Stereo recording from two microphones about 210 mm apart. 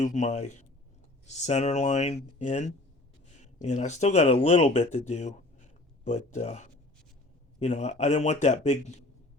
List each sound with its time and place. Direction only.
0.0 s speech: 35° left (ahead or behind)